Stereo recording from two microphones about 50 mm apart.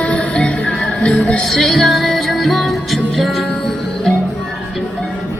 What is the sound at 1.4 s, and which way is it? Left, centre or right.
Music, centre.